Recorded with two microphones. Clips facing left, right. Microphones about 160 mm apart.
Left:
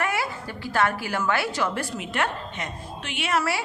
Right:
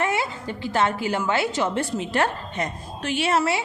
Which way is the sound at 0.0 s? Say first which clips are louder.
Right 3 dB; 20° right (ahead or behind).